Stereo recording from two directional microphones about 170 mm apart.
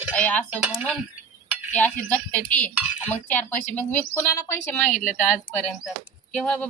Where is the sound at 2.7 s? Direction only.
10° right (ahead or behind).